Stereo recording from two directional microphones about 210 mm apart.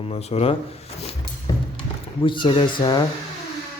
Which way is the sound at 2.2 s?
25° left (ahead or behind).